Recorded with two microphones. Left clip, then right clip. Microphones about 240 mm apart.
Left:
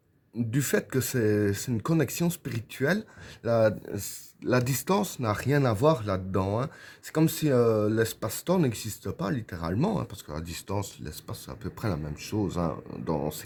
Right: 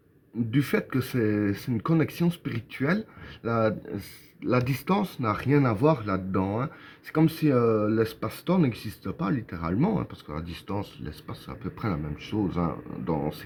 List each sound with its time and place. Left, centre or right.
0.5 s speech: left